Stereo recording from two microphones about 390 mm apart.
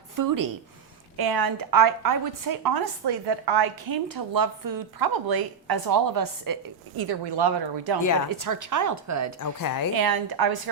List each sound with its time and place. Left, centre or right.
0.2 s speech: right
1.1 s a woman's voice: right
8.3 s speech: right
9.4 s a woman's voice: left
9.9 s a woman's voice: right